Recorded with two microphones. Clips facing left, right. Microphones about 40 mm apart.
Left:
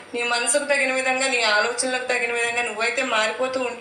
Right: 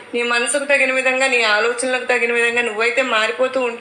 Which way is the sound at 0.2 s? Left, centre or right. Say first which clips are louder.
Right 4 dB; right.